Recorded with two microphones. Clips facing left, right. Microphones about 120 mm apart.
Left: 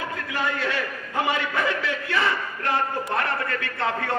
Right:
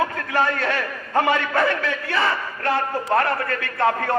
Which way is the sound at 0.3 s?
50° right (ahead or behind).